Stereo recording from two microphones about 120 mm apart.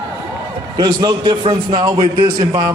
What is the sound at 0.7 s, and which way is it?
A man's voice, 35° right (ahead or behind).